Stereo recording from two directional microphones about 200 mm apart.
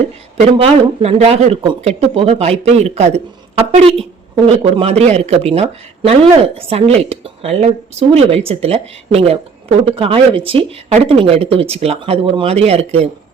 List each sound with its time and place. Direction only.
0.3 s speech: 30° right (ahead or behind)